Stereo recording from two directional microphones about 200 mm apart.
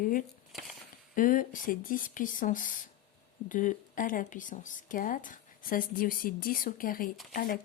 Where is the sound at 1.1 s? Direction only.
45° left (ahead or behind).